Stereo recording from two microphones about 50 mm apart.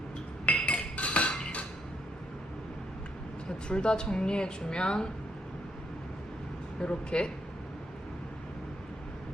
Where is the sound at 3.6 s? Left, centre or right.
Centre.